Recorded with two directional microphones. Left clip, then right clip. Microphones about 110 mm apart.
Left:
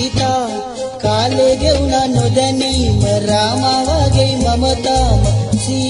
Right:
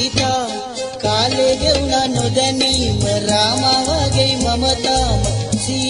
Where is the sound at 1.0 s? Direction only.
15° right (ahead or behind).